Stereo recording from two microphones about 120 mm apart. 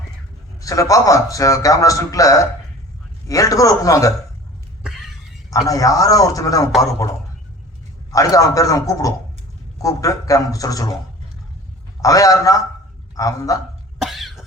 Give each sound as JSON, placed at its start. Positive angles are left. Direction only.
{"t": 0.6, "sound": "a man's voice", "side_deg": 30}
{"t": 5.5, "sound": "a man's voice", "side_deg": 30}
{"t": 6.7, "sound": "a man's voice", "side_deg": 0}
{"t": 8.1, "sound": "a man's voice", "side_deg": 30}
{"t": 12.0, "sound": "a man's voice", "side_deg": 30}
{"t": 14.0, "sound": "cough", "side_deg": 0}